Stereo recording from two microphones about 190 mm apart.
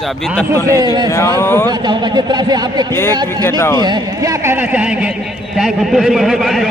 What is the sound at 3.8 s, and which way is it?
Speech, 20° right (ahead or behind).